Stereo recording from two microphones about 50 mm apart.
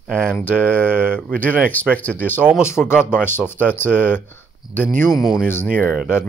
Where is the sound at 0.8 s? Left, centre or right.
Right.